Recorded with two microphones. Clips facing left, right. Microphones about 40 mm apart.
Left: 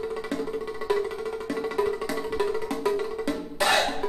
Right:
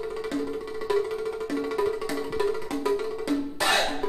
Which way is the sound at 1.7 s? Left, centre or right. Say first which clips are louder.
Left 1 dB; centre.